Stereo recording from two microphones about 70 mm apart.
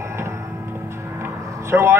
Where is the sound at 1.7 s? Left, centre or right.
Right.